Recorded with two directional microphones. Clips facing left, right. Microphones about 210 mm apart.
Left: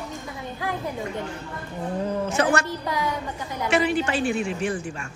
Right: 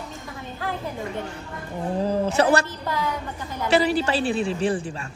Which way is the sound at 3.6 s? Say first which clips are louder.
Right 2 dB; 35° right (ahead or behind).